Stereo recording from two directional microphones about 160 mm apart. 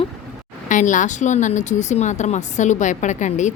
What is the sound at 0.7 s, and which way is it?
Speech, 50° left (ahead or behind).